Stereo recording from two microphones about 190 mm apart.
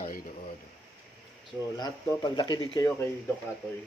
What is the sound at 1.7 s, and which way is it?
Speech, 20° left (ahead or behind).